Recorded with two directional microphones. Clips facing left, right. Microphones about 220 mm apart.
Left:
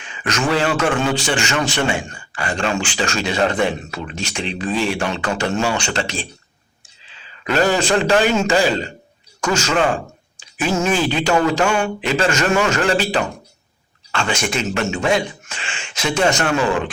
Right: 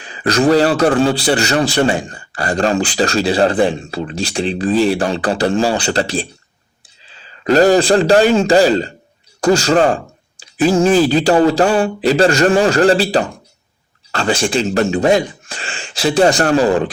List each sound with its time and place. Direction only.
0.0 s a man's voice: 35° right (ahead or behind)